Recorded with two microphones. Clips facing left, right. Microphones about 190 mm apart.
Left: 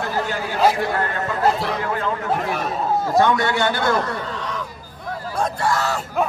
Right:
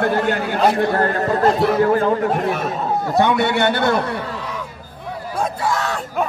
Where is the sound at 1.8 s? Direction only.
40° right (ahead or behind).